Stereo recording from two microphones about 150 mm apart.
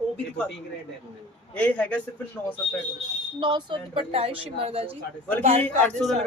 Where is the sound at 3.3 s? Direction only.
30° right (ahead or behind); by 6.0 s 50° right (ahead or behind).